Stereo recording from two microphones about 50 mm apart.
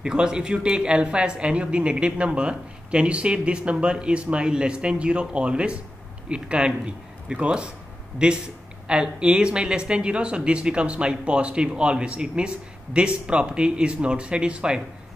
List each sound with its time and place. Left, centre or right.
0.0 s speech: centre